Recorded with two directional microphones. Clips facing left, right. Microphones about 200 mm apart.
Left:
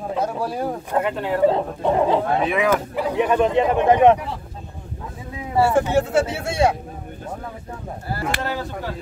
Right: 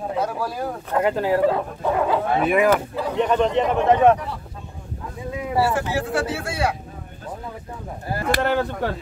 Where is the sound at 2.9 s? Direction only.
10° left (ahead or behind).